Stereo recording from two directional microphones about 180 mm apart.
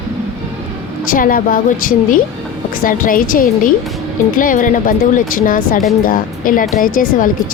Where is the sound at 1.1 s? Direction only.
50° left (ahead or behind).